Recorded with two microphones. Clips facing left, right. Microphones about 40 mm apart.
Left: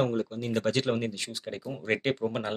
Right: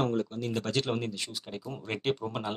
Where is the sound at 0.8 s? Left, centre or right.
Left.